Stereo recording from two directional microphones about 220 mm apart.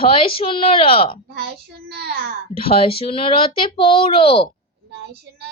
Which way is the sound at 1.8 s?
45° right (ahead or behind).